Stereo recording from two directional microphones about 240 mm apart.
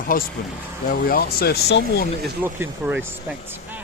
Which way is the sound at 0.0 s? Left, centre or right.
Left.